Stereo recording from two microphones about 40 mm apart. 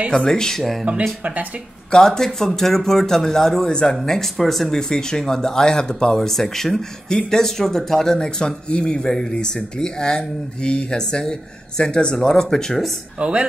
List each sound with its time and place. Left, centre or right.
0.1 s speech: centre
1.2 s speech: right
1.9 s speech: centre
4.7 s speech: centre
13.2 s speech: right